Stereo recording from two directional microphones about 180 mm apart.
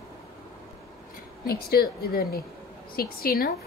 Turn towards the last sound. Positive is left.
turn(degrees=55)  # may be behind; listen again after turning